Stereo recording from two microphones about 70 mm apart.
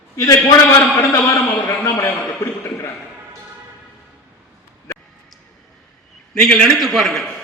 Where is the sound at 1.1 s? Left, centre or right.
Left.